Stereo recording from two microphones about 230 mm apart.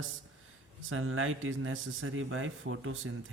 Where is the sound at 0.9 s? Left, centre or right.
Right.